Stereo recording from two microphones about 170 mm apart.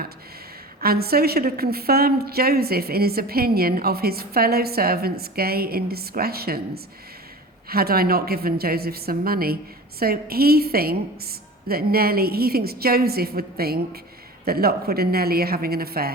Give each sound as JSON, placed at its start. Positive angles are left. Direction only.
{"t": 0.8, "sound": "a woman's voice", "side_deg": -65}